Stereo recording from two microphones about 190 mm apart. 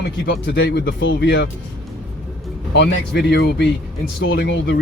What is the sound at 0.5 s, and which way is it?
Speech, 60° left (ahead or behind).